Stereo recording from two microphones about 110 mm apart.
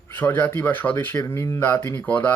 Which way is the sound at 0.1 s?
20° left (ahead or behind).